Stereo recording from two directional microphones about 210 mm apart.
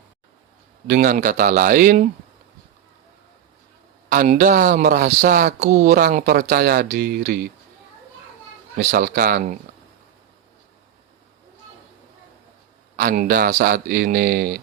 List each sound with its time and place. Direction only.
0.9 s speech: 45° right (ahead or behind)
4.1 s speech: 40° right (ahead or behind)
8.8 s speech: 45° right (ahead or behind)
13.0 s speech: 45° right (ahead or behind)